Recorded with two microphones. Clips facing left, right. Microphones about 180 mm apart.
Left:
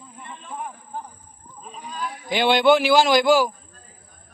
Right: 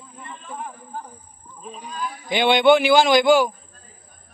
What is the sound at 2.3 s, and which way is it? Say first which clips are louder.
A man's voice: right 1 dB; centre (ahead or behind).